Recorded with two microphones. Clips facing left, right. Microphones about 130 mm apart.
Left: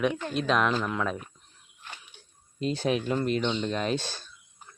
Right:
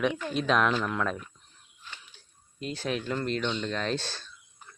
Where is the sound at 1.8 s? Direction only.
60° left (ahead or behind).